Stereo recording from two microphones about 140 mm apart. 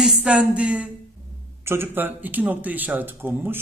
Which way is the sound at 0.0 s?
5° right (ahead or behind).